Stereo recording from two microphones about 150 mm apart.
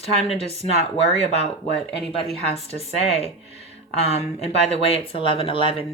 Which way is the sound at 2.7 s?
40° left (ahead or behind).